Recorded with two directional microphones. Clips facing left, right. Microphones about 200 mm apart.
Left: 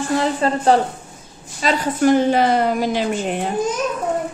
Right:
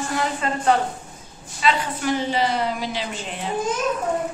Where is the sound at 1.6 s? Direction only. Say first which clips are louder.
Left 4 dB; 45° left (ahead or behind).